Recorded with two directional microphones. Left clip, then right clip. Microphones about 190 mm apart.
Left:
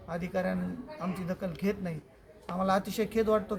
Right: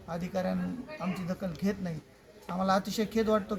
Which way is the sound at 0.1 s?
5° left (ahead or behind).